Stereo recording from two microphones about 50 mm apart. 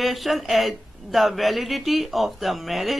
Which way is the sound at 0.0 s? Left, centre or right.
Centre.